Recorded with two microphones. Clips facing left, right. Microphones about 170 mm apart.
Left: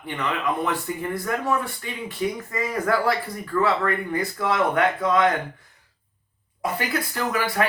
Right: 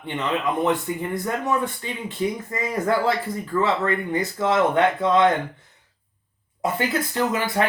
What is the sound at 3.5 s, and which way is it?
Speech, 20° right (ahead or behind).